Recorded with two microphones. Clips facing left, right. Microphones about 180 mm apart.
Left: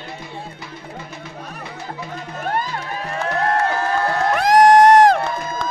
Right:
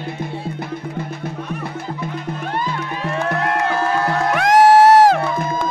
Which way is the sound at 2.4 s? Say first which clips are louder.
Left 2 dB; 45° left (ahead or behind).